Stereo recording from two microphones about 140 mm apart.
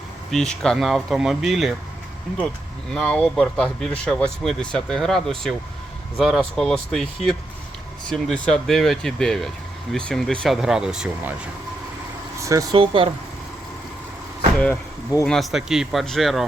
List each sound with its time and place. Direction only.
0.3 s speech: 5° left (ahead or behind)
2.9 s speech: 5° left (ahead or behind)
12.4 s speech: 20° right (ahead or behind)
12.7 s speech: 40° right (ahead or behind)
15.2 s speech: 5° left (ahead or behind)